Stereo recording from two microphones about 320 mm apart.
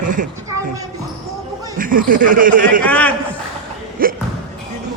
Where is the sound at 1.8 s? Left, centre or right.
Right.